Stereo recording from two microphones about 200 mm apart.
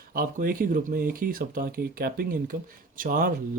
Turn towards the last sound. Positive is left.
turn(degrees=-45)  # may be behind; listen again after turning